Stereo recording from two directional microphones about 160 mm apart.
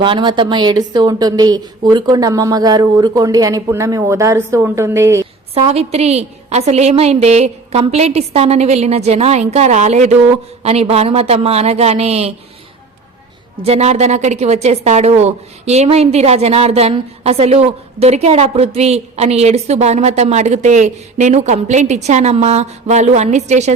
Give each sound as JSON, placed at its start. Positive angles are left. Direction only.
{"t": 0.0, "sound": "a woman's voice", "side_deg": -30}
{"t": 5.5, "sound": "a woman's voice", "side_deg": -40}
{"t": 13.6, "sound": "a woman's voice", "side_deg": -40}